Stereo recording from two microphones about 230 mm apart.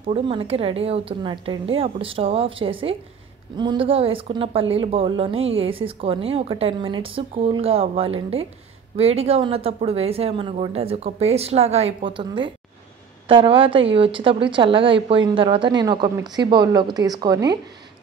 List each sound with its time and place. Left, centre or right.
0.1 s a woman's voice: right